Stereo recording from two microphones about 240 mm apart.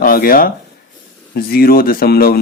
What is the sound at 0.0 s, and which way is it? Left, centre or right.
A man's voice, left.